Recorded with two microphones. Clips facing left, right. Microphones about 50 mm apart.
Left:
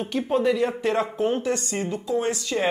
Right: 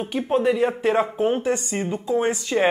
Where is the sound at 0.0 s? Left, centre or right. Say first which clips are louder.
Right 2 dB; centre.